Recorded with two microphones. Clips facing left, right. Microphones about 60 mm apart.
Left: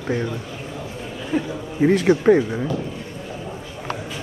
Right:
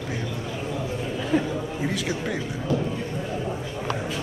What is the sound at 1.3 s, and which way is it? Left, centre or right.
Speech, centre.